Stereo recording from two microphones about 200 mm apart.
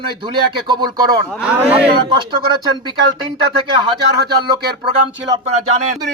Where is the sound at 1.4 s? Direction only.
5° right (ahead or behind).